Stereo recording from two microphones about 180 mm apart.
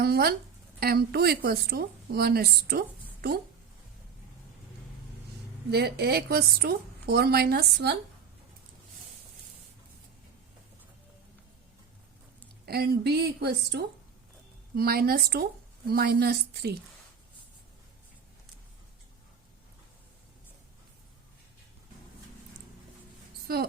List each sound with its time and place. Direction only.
0.0 s a woman's voice: 60° right (ahead or behind)
5.7 s a woman's voice: 65° right (ahead or behind)
12.6 s a woman's voice: 60° right (ahead or behind)